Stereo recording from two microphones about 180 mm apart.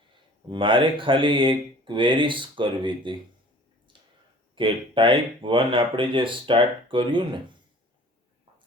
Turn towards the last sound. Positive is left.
turn(degrees=-25)  # may be behind; listen again after turning